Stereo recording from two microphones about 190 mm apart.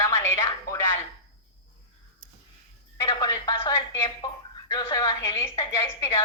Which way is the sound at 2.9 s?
20° left (ahead or behind).